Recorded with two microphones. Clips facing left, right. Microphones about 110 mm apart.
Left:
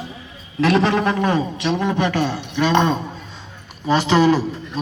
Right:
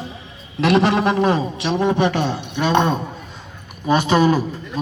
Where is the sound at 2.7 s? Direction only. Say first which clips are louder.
Right 1 dB; 10° right (ahead or behind).